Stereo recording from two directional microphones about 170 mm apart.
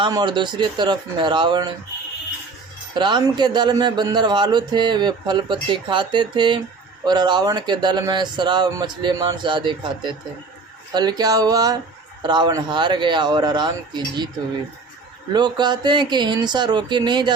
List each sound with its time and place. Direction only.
0.0 s speech: 25° right (ahead or behind)
2.9 s speech: 25° right (ahead or behind)
15.3 s speech: 25° right (ahead or behind)